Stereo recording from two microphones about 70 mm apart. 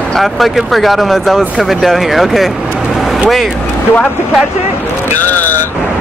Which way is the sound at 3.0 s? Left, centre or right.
Centre.